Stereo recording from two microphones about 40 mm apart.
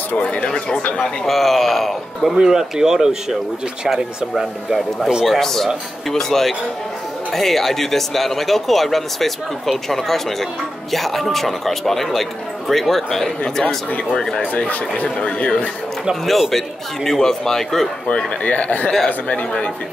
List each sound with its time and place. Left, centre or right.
1.2 s speech: centre
2.3 s speech: centre
5.2 s speech: centre
15.1 s a man's voice: left
16.3 s speech: centre
18.0 s a man's voice: left